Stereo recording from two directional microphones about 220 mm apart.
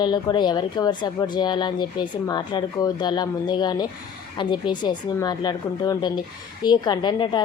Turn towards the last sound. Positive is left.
turn(degrees=20)  # may be behind; listen again after turning